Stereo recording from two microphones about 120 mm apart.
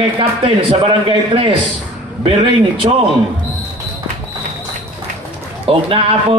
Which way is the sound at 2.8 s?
40° right (ahead or behind).